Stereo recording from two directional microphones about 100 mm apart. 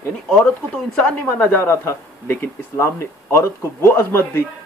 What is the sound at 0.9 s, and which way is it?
Speech, 10° left (ahead or behind).